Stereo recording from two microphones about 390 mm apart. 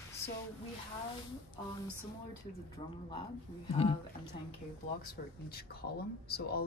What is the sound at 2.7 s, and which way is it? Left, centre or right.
Speech, centre.